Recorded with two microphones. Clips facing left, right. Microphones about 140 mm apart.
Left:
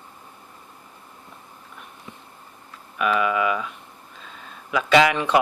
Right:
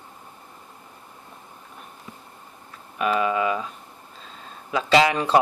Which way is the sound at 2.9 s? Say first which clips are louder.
Even; 30° right (ahead or behind).